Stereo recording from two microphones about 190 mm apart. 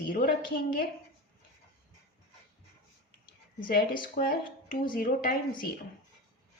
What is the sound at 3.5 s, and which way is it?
Speech, 50° left (ahead or behind).